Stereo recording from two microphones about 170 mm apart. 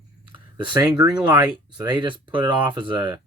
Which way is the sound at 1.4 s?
25° right (ahead or behind).